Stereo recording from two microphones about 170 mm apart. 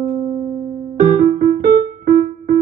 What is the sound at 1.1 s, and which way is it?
Piano, 50° right (ahead or behind).